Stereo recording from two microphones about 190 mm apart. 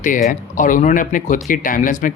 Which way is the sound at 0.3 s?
45° left (ahead or behind).